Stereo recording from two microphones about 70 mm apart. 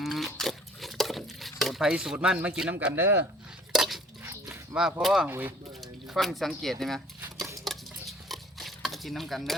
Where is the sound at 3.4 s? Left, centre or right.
Centre.